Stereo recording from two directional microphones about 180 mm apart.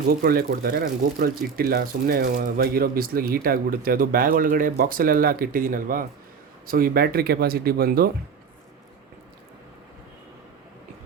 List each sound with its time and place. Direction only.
0.1 s speech: 55° right (ahead or behind)